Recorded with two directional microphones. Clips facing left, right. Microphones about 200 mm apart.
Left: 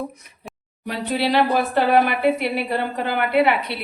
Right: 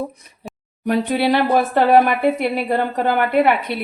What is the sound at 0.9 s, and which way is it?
A woman's voice, 55° right (ahead or behind).